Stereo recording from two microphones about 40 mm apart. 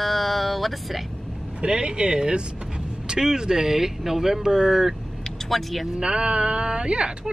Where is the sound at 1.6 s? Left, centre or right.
Right.